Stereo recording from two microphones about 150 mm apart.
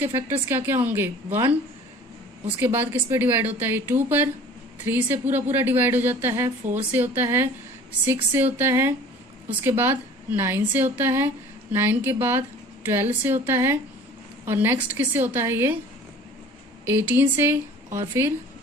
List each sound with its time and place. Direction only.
0.0 s speech: 15° right (ahead or behind)
2.6 s speech: 15° right (ahead or behind)
16.8 s speech: 15° right (ahead or behind)